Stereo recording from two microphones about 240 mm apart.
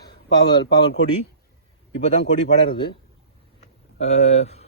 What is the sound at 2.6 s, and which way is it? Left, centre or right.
Speech, left.